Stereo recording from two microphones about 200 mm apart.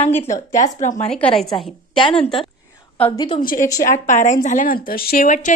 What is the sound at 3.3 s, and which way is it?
A woman's voice, 45° left (ahead or behind).